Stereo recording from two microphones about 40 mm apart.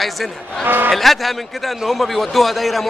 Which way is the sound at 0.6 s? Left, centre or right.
Right.